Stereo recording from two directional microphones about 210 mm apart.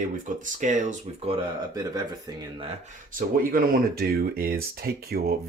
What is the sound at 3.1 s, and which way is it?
Speech, 40° right (ahead or behind).